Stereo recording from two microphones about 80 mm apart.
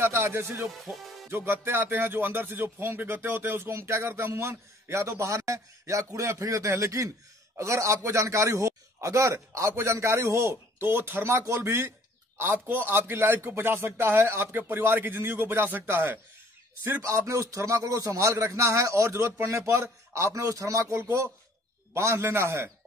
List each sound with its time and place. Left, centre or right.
0.0 s speech: right
0.7 s speech: centre
1.3 s speech: right
17.0 s speech: right